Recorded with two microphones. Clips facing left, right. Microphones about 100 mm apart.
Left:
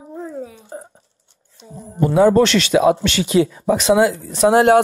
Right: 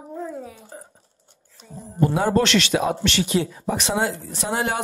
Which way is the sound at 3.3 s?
90° left.